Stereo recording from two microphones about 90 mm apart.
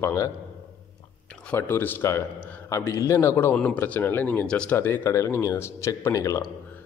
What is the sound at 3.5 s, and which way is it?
Speech, 15° left (ahead or behind).